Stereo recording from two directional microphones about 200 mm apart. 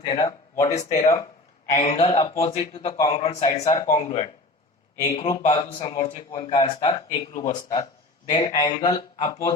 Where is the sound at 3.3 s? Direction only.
30° left (ahead or behind).